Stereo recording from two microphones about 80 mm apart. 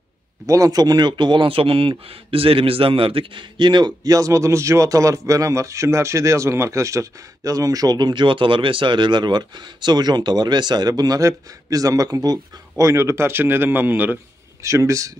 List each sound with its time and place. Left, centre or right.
0.5 s a man's voice: right
14.6 s speech: right